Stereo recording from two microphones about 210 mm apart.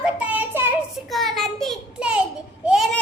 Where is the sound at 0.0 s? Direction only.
5° right (ahead or behind).